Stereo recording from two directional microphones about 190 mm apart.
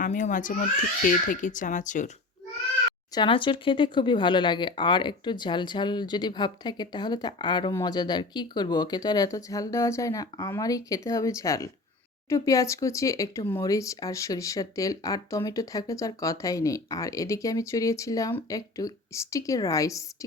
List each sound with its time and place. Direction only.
0.0 s speech: 40° left (ahead or behind)
3.2 s speech: 25° left (ahead or behind)